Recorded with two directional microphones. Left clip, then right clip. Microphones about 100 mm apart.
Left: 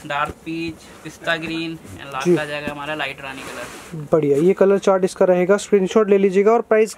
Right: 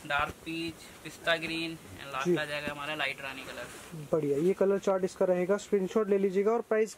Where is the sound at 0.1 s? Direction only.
Centre (ahead or behind).